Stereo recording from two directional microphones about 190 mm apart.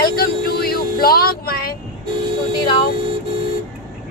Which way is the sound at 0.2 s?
55° left (ahead or behind).